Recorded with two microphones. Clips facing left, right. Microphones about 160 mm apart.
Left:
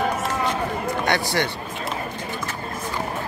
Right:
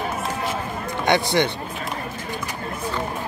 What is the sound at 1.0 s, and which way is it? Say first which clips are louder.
Speech: right 6 dB; 20° right (ahead or behind).